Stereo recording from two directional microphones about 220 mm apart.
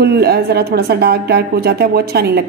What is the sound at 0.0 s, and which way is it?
A woman's voice, 45° right (ahead or behind).